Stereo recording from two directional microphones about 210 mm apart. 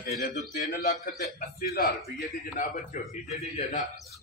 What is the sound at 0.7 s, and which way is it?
A man's voice, 40° left (ahead or behind).